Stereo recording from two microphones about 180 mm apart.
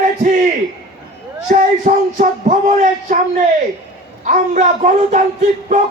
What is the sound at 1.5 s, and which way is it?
Music, 45° right (ahead or behind).